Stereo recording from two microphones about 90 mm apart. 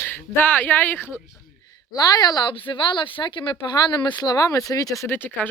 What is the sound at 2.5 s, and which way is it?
Speech, 65° left (ahead or behind).